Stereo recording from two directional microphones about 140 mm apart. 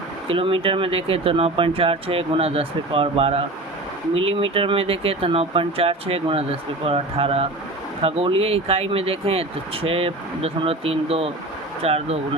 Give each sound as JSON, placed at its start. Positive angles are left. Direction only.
{"t": 0.3, "sound": "speech", "side_deg": -40}